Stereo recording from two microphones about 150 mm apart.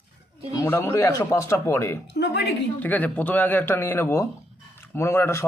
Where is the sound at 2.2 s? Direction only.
90° left.